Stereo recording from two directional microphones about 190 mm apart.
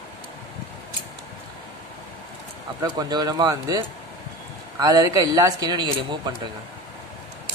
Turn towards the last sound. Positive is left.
turn(degrees=-20)  # may be behind; listen again after turning